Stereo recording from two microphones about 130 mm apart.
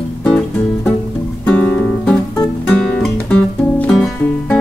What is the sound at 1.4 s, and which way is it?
Music, 10° left (ahead or behind).